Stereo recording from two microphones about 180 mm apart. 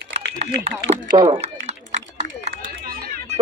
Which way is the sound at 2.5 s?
50° right (ahead or behind).